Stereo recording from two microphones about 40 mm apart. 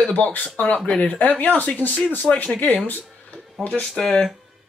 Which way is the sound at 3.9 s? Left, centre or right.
Centre.